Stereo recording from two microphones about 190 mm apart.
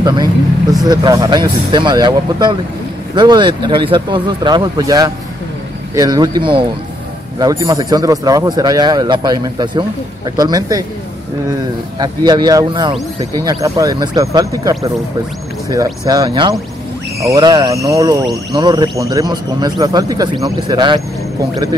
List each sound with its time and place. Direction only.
0.0 s speech: 20° right (ahead or behind)
12.0 s speech: 20° right (ahead or behind)